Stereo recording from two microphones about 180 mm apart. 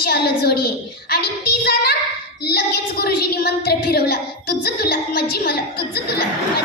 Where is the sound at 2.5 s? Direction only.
60° left (ahead or behind).